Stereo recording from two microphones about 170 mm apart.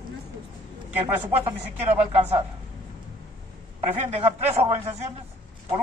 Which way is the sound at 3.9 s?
35° right (ahead or behind).